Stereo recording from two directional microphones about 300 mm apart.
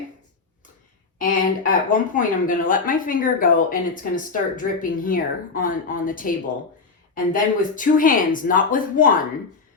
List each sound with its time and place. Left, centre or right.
1.2 s speech: left